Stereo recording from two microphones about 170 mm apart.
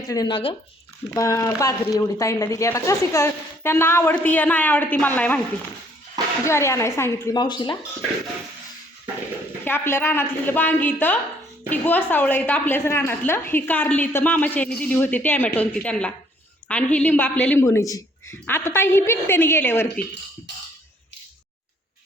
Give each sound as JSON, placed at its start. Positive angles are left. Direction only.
{"t": 0.1, "sound": "speech", "side_deg": 25}
{"t": 1.1, "sound": "a woman's voice", "side_deg": 20}
{"t": 6.4, "sound": "a woman's voice", "side_deg": 15}
{"t": 7.4, "sound": "speech", "side_deg": 30}
{"t": 9.6, "sound": "a woman's voice", "side_deg": 15}